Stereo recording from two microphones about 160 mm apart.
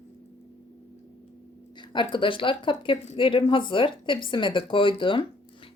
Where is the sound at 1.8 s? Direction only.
30° left (ahead or behind).